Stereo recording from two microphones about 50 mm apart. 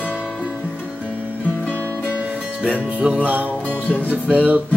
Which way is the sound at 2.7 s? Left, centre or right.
Right.